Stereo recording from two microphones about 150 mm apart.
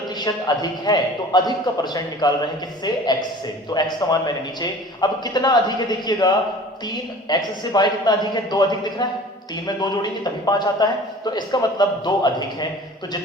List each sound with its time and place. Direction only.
0.2 s a man's voice: 25° left (ahead or behind)